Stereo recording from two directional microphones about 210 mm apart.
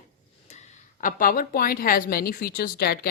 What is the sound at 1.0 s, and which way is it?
A woman's voice, 40° left (ahead or behind).